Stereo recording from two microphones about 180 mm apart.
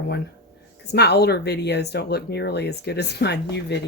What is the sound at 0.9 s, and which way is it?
Speech, 65° left (ahead or behind).